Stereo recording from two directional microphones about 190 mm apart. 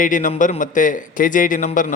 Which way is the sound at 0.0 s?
45° left (ahead or behind).